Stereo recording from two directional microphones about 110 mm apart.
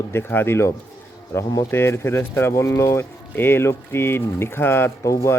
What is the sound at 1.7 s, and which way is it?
Speech, 20° left (ahead or behind).